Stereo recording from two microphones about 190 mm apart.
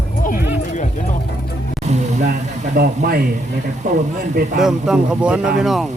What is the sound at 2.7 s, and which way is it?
Speech, 50° right (ahead or behind).